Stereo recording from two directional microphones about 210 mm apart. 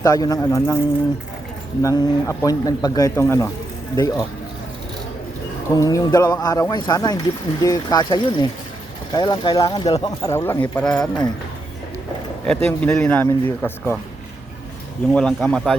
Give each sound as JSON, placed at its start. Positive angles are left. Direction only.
{"t": 0.0, "sound": "speech", "side_deg": 15}
{"t": 1.8, "sound": "speech", "side_deg": 15}
{"t": 5.7, "sound": "speech", "side_deg": 15}
{"t": 12.5, "sound": "speech", "side_deg": 10}
{"t": 15.1, "sound": "speech", "side_deg": 5}